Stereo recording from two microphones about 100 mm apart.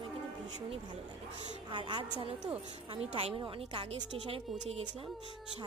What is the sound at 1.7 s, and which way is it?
Speech, 50° right (ahead or behind).